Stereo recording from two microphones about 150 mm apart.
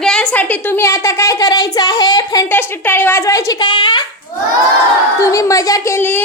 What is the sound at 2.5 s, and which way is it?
A woman's voice, 15° left (ahead or behind).